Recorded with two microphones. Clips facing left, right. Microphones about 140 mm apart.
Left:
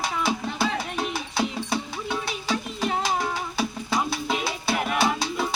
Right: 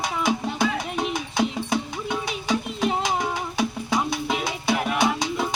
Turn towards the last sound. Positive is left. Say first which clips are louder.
# right 2 dB
turn(degrees=-15)  # may be behind; listen again after turning